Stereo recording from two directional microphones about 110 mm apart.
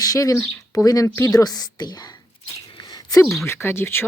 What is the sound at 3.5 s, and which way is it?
Speech, 20° left (ahead or behind).